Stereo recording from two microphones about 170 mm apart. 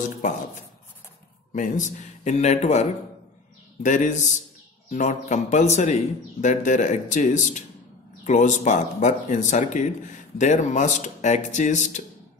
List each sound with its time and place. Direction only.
1.5 s speech: 50° left (ahead or behind)